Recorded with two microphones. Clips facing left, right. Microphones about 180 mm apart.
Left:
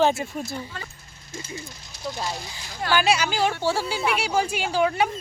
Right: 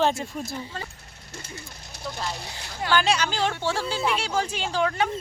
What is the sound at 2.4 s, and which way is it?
Speech, 65° right (ahead or behind).